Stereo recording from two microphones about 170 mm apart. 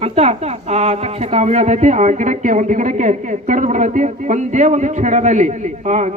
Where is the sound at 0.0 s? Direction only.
40° right (ahead or behind).